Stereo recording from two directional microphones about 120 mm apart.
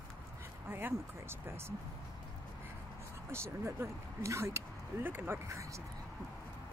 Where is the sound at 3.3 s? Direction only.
20° right (ahead or behind).